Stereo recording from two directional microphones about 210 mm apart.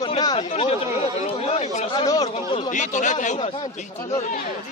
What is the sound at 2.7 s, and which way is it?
Speech, 35° left (ahead or behind).